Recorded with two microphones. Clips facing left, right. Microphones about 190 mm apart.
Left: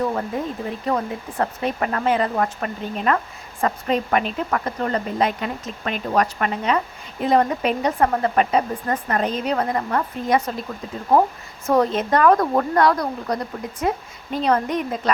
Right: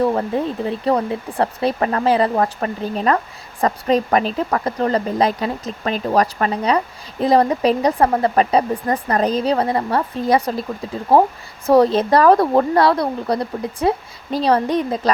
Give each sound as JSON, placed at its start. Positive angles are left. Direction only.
{"t": 0.0, "sound": "speech", "side_deg": -30}